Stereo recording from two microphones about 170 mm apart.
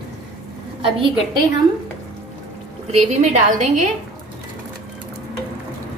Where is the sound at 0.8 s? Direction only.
30° right (ahead or behind).